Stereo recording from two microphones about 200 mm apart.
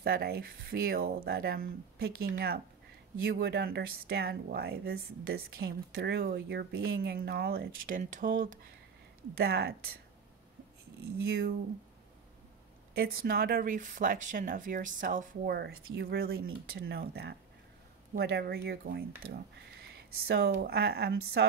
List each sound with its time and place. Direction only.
0.0 s speech: 50° right (ahead or behind)
9.4 s speech: 50° right (ahead or behind)
12.9 s speech: 50° right (ahead or behind)